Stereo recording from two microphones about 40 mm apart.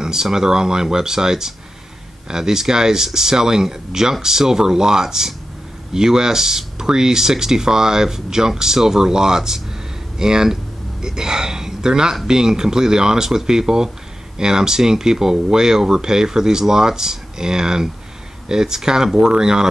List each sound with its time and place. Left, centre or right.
0.0 s speech: centre